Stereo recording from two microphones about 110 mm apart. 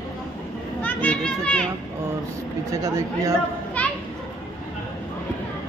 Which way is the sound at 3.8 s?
10° left (ahead or behind).